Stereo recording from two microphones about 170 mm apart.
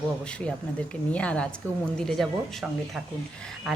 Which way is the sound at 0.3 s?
5° left (ahead or behind).